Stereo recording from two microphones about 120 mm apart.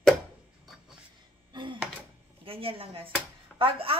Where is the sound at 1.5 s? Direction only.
40° right (ahead or behind).